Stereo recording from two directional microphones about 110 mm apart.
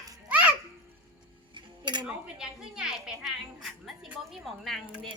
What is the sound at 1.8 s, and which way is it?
Cutlery, 45° right (ahead or behind).